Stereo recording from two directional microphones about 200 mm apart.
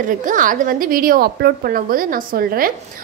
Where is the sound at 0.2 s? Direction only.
40° right (ahead or behind).